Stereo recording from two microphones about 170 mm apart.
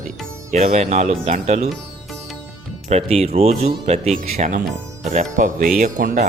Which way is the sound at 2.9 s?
35° right (ahead or behind).